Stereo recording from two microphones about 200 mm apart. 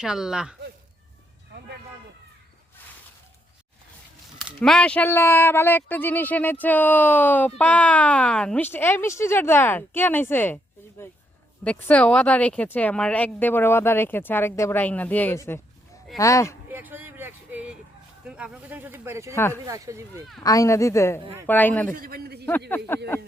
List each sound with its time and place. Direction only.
0.0 s speech: 5° right (ahead or behind)
2.8 s a sound: 10° left (ahead or behind)
4.4 s speech: centre (ahead or behind)
16.6 s vehicle: 10° right (ahead or behind)
18.3 s speech: 5° right (ahead or behind)
20.4 s speech: 15° left (ahead or behind)
21.9 s a man's voice: 45° right (ahead or behind)